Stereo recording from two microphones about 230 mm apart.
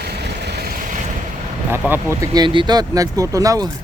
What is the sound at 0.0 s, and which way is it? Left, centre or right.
Vehicle, right.